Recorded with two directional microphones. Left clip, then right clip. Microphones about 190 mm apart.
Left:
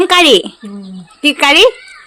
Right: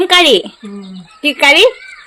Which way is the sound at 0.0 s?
15° left (ahead or behind).